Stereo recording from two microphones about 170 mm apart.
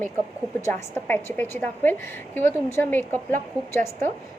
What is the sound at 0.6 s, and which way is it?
A woman's voice, 10° left (ahead or behind).